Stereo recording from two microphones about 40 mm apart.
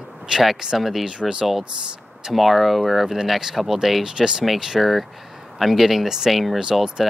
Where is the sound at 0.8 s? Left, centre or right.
Centre.